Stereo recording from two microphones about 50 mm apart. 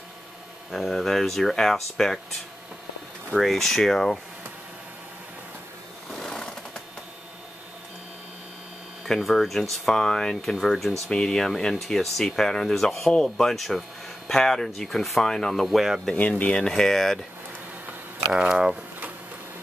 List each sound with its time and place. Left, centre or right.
0.7 s speech: centre
3.3 s speech: centre
6.0 s sewing machine: centre
9.0 s speech: centre
16.2 s speech: left
16.6 s speech: centre
18.3 s speech: centre